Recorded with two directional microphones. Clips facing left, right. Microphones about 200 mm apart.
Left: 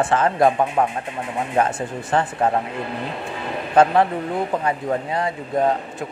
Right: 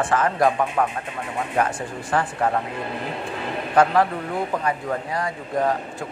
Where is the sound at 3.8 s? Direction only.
25° left (ahead or behind).